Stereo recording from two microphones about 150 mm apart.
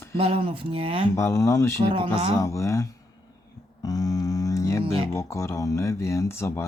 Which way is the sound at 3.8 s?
25° left (ahead or behind).